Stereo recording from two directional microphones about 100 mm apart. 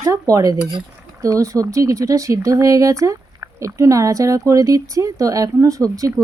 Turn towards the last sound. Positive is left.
turn(degrees=-35)  # may be behind; listen again after turning